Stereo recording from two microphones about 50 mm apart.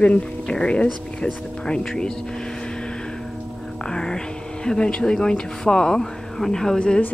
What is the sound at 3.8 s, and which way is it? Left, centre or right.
Speech, centre.